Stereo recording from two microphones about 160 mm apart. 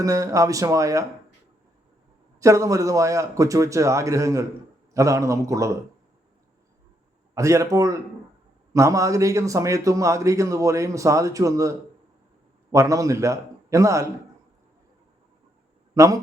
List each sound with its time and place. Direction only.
0.0 s a man's voice: 20° right (ahead or behind)
2.4 s a man's voice: 20° right (ahead or behind)
7.3 s a man's voice: 20° right (ahead or behind)
16.0 s a man's voice: 20° right (ahead or behind)